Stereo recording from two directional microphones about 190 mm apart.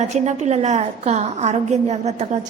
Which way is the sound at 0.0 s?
40° right (ahead or behind).